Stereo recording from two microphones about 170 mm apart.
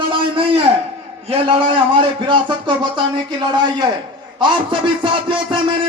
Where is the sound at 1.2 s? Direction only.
30° right (ahead or behind).